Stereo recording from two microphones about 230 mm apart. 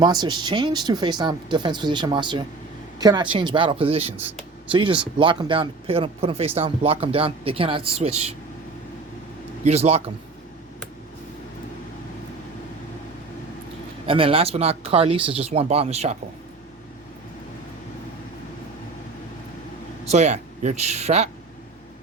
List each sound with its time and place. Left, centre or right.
0.0 s speech: centre
9.6 s speech: right
14.1 s speech: right
20.1 s speech: right